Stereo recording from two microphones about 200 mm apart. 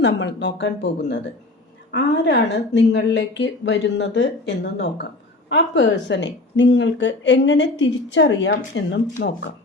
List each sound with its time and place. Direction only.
0.0 s a woman's voice: 60° left (ahead or behind)